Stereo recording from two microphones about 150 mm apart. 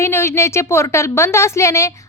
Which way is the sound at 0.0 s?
15° left (ahead or behind).